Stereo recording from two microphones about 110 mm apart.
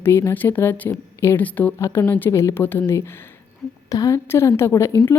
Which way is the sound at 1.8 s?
25° left (ahead or behind).